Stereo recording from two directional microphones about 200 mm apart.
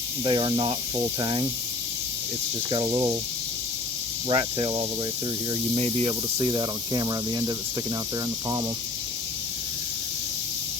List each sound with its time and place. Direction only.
0.3 s speech: 25° right (ahead or behind)
2.6 s speech: 20° right (ahead or behind)
4.3 s speech: 25° right (ahead or behind)